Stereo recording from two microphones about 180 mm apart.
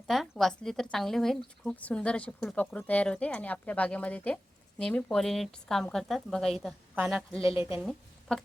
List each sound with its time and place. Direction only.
0.1 s a woman's voice: centre (ahead or behind)